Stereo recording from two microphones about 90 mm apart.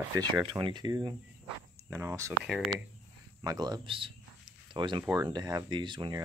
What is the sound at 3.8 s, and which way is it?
Speech, 70° right (ahead or behind).